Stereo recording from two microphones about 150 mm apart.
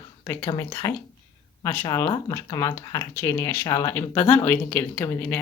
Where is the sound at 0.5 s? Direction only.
20° left (ahead or behind).